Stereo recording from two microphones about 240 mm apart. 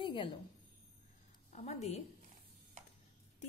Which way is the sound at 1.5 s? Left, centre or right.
Left.